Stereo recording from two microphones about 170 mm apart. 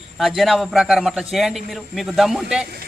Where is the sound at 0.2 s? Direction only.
Centre (ahead or behind).